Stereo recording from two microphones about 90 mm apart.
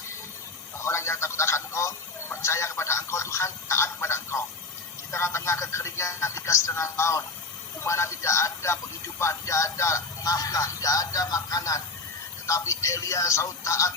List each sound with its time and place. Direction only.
0.8 s speech: 30° left (ahead or behind)